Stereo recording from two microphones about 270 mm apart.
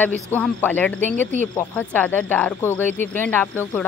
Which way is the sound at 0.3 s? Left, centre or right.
Centre.